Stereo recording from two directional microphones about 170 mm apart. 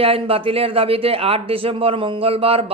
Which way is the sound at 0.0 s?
35° right (ahead or behind).